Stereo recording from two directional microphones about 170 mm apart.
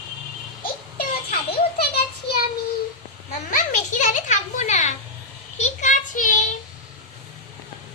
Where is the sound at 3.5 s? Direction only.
45° left (ahead or behind).